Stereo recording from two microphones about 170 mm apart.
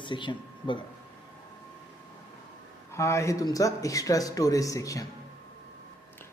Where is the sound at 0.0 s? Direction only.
30° left (ahead or behind).